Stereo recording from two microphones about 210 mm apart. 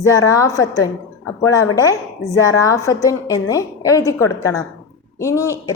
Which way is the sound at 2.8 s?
15° left (ahead or behind).